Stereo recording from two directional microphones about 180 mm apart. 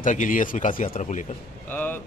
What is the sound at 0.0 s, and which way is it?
Speech, 45° left (ahead or behind).